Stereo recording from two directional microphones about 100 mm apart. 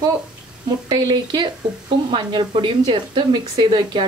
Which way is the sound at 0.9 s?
45° right (ahead or behind).